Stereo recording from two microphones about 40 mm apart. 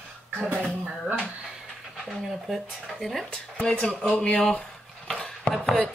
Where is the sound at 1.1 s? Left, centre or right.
Right.